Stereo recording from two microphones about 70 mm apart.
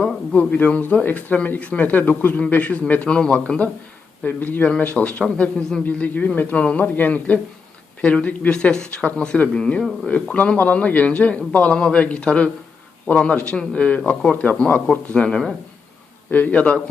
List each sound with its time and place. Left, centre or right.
0.0 s speech: left
4.2 s speech: left; by 5.8 s centre
5.8 s speech: left